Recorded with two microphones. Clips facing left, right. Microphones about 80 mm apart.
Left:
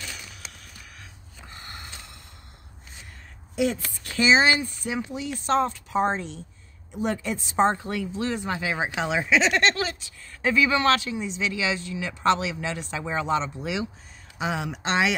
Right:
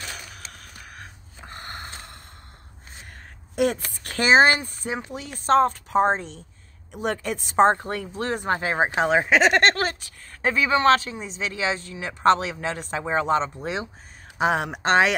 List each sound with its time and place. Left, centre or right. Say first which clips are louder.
0.0 s a sound: right 2 dB; right
3.5 s speech: right 2 dB; right
6.9 s speech: right 1 dB; right
10.5 s speech: right 2 dB; right
14.4 s speech: right 6 dB; right